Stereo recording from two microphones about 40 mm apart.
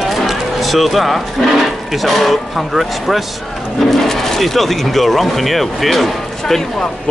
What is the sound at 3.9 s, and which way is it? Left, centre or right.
Speech, centre.